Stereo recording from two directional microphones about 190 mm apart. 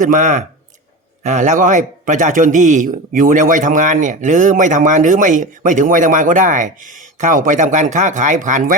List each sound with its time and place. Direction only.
0.0 s a man's voice: 40° right (ahead or behind)